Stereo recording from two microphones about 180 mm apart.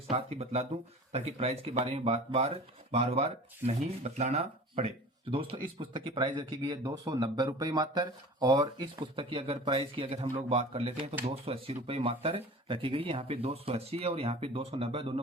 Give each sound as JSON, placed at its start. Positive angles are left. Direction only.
{"t": 0.1, "sound": "speech", "side_deg": -35}